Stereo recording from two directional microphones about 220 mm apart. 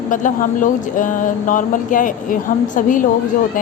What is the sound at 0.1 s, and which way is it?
Speech, 35° left (ahead or behind).